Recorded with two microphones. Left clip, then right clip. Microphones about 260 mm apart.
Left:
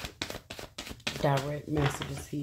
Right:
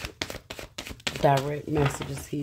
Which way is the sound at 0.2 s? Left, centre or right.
Right.